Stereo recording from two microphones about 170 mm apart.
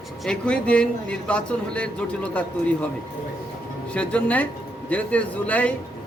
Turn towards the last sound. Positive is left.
turn(degrees=10)  # may be behind; listen again after turning